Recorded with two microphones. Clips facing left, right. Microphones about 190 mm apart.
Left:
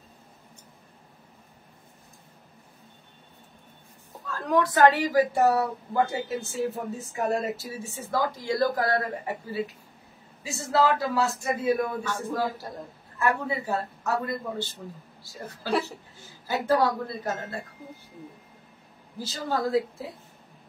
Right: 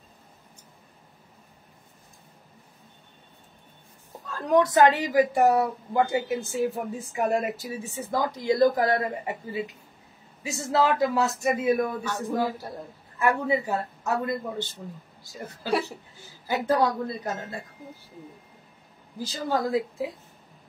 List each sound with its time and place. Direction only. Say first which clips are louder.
4.3 s speech: right 3 dB; 20° right (ahead or behind)
16.4 s speech: even; 20° right (ahead or behind)
19.1 s speech: right 2 dB; 15° right (ahead or behind)